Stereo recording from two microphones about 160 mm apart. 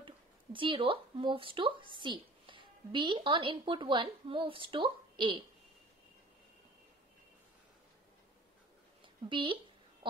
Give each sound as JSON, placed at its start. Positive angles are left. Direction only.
{"t": 0.0, "sound": "speech", "side_deg": -30}
{"t": 9.0, "sound": "a woman's voice", "side_deg": -30}